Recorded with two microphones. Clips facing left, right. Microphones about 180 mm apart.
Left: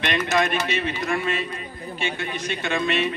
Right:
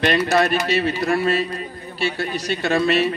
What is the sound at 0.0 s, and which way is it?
A man's voice, 35° right (ahead or behind).